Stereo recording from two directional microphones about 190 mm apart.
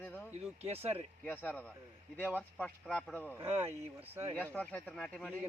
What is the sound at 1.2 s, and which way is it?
Speech, 10° left (ahead or behind).